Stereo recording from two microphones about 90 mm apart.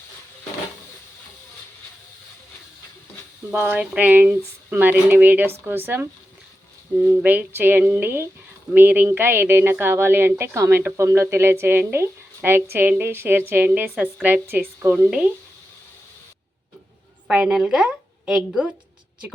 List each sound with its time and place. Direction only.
3.5 s a woman's voice: 20° right (ahead or behind)
7.2 s a woman's voice: 20° right (ahead or behind)
17.2 s a woman's voice: 10° right (ahead or behind)